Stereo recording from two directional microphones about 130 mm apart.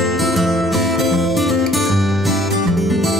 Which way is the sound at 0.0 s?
Centre (ahead or behind).